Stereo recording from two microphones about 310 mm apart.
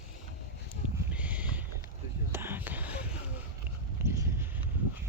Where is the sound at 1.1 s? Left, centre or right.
Centre.